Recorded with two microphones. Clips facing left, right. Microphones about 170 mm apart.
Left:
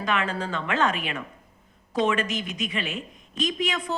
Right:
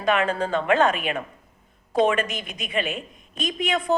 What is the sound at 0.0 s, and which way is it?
A woman's voice, 55° right (ahead or behind).